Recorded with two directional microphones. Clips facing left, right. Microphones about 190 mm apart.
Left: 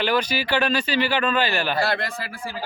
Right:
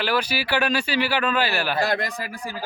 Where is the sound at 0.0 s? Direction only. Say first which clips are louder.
Left 2 dB; 5° right (ahead or behind).